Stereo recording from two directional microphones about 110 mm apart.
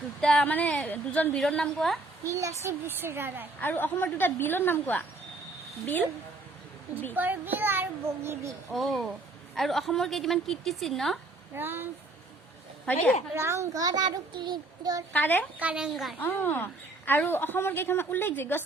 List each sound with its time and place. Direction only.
0.2 s a woman's voice: 5° left (ahead or behind)
2.2 s a child's voice: 30° right (ahead or behind)
3.6 s a woman's voice: 15° left (ahead or behind)
7.2 s a child's voice: 15° right (ahead or behind)
8.7 s a woman's voice: centre (ahead or behind)
11.5 s a child's voice: 20° right (ahead or behind)
13.3 s a child's voice: 25° right (ahead or behind)
15.1 s speech: 15° left (ahead or behind)
15.5 s speech: 10° right (ahead or behind)
16.1 s a woman's voice: 15° left (ahead or behind)